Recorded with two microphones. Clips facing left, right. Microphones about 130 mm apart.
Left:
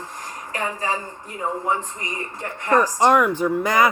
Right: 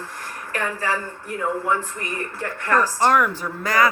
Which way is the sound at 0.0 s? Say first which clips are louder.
Even; 15° left (ahead or behind).